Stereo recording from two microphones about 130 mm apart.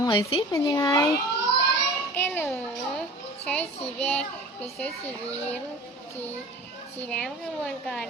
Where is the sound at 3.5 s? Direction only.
10° left (ahead or behind).